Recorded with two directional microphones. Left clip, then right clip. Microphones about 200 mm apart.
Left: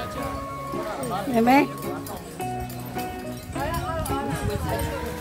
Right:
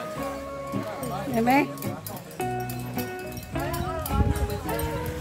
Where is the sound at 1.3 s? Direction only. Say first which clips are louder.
Left 3 dB; 15° left (ahead or behind).